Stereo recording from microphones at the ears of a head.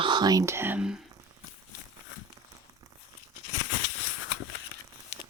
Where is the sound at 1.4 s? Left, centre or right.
Left.